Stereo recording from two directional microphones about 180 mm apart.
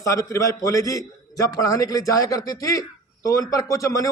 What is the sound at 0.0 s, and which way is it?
A man's voice, 20° left (ahead or behind).